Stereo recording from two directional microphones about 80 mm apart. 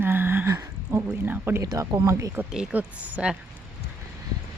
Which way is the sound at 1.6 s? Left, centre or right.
Right.